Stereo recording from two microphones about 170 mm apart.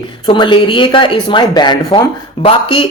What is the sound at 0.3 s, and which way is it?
Speech, 30° left (ahead or behind).